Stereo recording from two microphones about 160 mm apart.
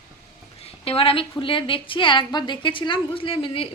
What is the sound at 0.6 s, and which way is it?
A woman's voice, 35° left (ahead or behind).